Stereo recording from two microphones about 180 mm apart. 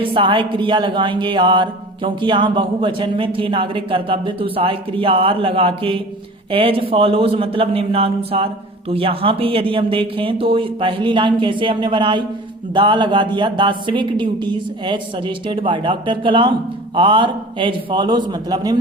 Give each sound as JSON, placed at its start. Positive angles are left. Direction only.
{"t": 0.0, "sound": "music", "side_deg": -30}
{"t": 6.5, "sound": "a man's voice", "side_deg": -30}
{"t": 8.9, "sound": "music", "side_deg": -30}